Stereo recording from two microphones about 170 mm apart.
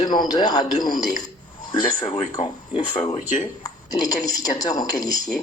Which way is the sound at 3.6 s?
20° left (ahead or behind).